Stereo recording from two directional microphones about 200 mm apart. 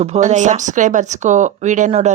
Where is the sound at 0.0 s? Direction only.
35° right (ahead or behind).